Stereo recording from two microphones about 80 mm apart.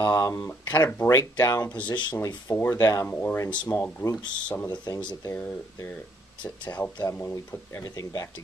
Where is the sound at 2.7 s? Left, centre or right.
Left.